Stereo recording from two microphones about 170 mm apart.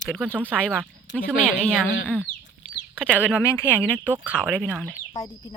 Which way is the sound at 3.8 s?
10° right (ahead or behind).